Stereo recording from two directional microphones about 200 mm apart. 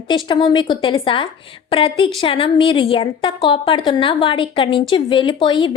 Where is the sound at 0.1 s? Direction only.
20° left (ahead or behind).